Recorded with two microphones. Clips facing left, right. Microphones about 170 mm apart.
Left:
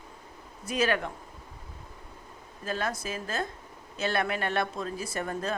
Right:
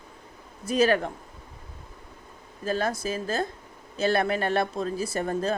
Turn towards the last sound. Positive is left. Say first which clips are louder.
# right 5 dB
turn(degrees=-35)  # may be behind; listen again after turning